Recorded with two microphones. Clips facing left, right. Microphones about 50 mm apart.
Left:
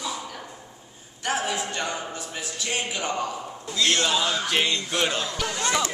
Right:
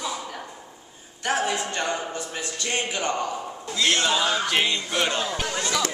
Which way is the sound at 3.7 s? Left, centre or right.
Centre.